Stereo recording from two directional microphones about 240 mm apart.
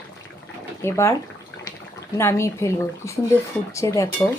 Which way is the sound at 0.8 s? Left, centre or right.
Centre.